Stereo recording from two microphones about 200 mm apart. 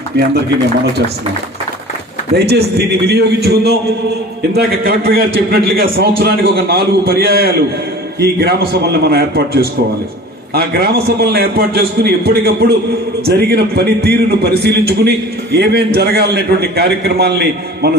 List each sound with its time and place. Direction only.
2.3 s a man's voice: 55° right (ahead or behind)